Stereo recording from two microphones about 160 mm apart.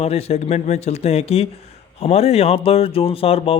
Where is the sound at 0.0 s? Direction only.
40° left (ahead or behind).